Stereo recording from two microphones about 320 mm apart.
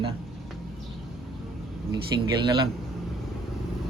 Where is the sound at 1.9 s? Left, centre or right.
Centre.